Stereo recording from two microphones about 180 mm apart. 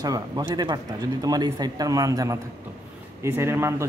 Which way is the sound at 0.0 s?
20° right (ahead or behind).